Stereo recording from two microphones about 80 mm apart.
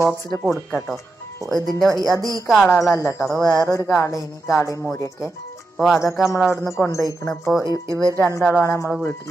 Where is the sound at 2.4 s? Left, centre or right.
Centre.